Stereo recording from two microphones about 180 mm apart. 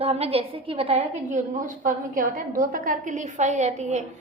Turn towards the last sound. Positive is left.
turn(degrees=-40)  # may be behind; listen again after turning